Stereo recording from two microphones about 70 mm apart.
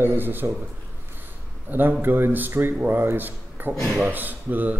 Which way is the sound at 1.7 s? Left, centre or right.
Right.